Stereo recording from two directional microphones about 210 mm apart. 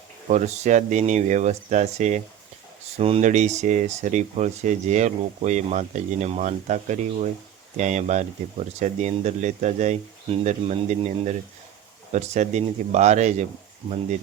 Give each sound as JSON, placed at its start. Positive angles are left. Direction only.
{"t": 0.3, "sound": "speech", "side_deg": -35}